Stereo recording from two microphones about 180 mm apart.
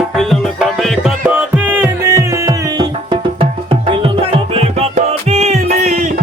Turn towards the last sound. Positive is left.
turn(degrees=-45)  # may be behind; listen again after turning